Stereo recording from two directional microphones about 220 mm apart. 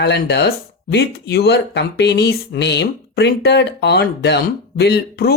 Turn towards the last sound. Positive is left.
turn(degrees=45)  # may be behind; listen again after turning